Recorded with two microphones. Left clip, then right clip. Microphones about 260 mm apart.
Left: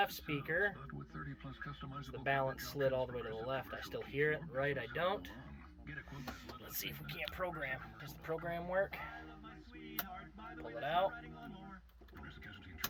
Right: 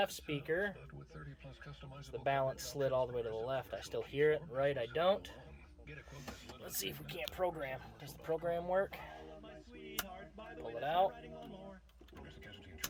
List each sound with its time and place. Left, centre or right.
0.0 s speech: centre
2.2 s speech: centre
6.7 s speech: centre
10.8 s speech: centre